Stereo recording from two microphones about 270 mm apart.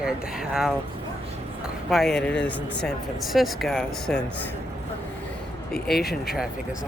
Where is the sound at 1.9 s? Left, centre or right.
Centre.